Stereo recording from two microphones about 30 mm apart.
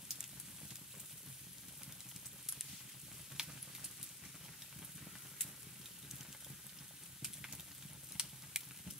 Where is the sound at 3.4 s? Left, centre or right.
Right.